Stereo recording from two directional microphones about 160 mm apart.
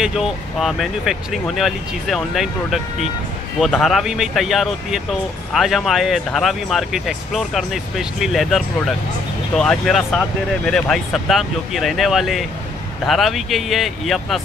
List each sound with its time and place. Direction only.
0.0 s speech: centre (ahead or behind)